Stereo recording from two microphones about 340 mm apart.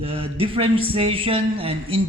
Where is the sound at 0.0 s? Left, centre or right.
Centre.